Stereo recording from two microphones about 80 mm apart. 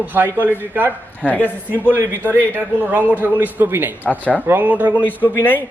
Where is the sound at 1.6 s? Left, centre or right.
Right.